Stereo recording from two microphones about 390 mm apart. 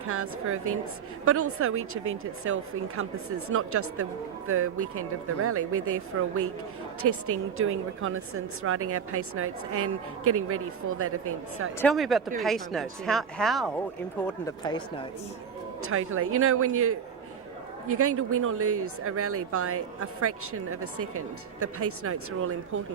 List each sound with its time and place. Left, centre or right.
0.1 s speech: right
11.8 s speech: centre
15.8 s speech: right